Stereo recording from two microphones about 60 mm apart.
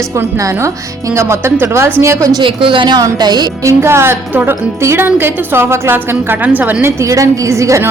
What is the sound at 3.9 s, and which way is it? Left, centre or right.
Speech, right.